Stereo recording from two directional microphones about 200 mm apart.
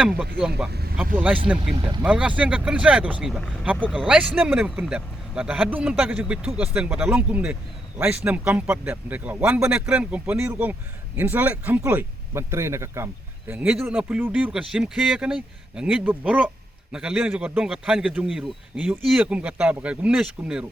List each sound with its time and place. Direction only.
0.2 s speech: 5° right (ahead or behind)
1.7 s speech: 25° right (ahead or behind)
2.0 s a man's voice: 5° right (ahead or behind)